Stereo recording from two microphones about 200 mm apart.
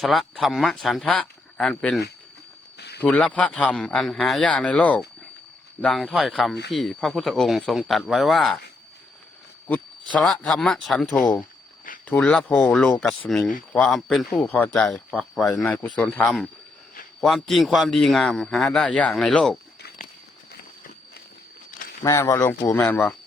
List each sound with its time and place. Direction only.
0.0 s a man's voice: centre (ahead or behind)
2.7 s a sound: 55° left (ahead or behind)
3.0 s a man's voice: 5° left (ahead or behind)
9.6 s a man's voice: 5° left (ahead or behind)
22.0 s speech: 15° left (ahead or behind)